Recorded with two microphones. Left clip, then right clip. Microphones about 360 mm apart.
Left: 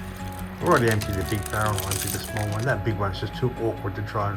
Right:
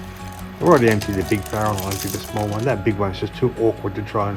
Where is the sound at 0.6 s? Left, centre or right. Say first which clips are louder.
Right 6 dB; right.